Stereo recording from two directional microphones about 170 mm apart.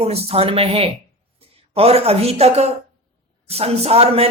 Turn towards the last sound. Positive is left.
turn(degrees=-35)  # may be behind; listen again after turning